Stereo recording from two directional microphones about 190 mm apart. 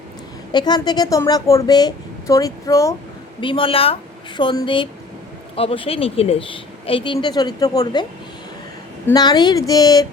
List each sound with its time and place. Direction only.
0.5 s a woman's voice: 25° left (ahead or behind)
3.4 s a woman's voice: 25° left (ahead or behind)
9.1 s a woman's voice: 20° left (ahead or behind)